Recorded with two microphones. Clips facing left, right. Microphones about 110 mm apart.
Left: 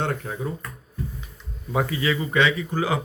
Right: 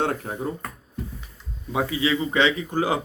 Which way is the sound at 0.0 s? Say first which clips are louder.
Right 2 dB; 45° right (ahead or behind).